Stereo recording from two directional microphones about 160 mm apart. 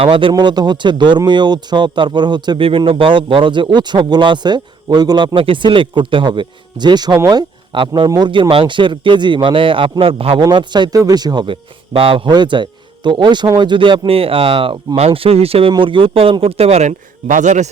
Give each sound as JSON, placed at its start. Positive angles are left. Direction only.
{"t": 0.0, "sound": "a man's voice", "side_deg": -30}